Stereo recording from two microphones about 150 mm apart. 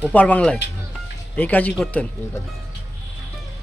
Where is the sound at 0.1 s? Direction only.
10° left (ahead or behind).